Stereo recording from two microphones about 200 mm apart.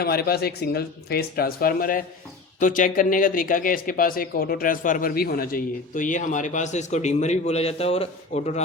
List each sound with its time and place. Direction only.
0.0 s speech: 50° left (ahead or behind); by 8.6 s 35° left (ahead or behind)